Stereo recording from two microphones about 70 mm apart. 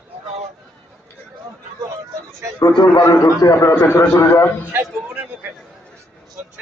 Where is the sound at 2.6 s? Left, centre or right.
Left.